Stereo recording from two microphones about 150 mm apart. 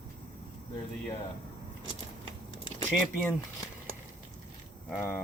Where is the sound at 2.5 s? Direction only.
30° left (ahead or behind).